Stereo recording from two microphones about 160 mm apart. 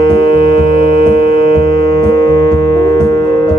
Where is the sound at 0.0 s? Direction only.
35° left (ahead or behind).